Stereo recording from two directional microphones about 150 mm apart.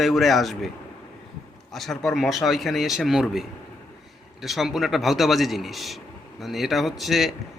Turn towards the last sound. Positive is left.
turn(degrees=0)  # may be behind; listen again after turning